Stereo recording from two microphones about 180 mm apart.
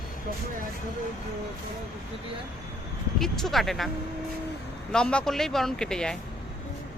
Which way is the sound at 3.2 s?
Centre (ahead or behind).